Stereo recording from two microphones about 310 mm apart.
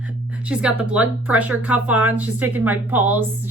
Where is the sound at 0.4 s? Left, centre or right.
Centre.